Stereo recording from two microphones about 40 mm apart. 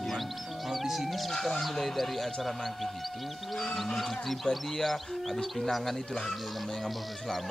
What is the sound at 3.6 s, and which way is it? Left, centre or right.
Speech, centre.